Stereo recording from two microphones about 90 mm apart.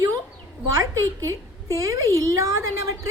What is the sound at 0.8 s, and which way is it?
A woman's voice, 35° right (ahead or behind).